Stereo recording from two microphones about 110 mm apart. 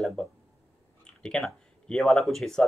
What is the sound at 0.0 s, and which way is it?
Speech, 5° left (ahead or behind).